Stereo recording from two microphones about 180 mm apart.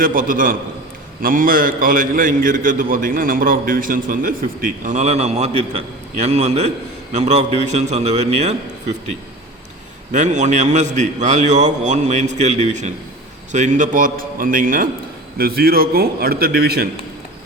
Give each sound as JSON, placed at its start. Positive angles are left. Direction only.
{"t": 0.0, "sound": "a man's voice", "side_deg": -50}
{"t": 10.1, "sound": "a man's voice", "side_deg": -40}